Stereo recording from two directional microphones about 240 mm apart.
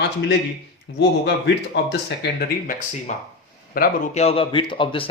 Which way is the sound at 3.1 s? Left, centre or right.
Left.